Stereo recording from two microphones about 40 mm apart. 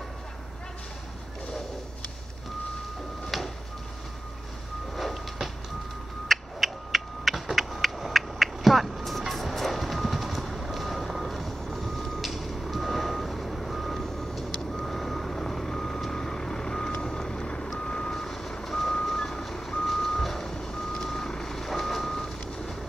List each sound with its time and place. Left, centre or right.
4.9 s vehicle: centre
6.2 s a sound: centre
8.1 s music: centre
14.8 s reversing beeps: centre
17.0 s vehicle: centre
17.7 s reversing beeps: left
18.1 s reversing beeps: centre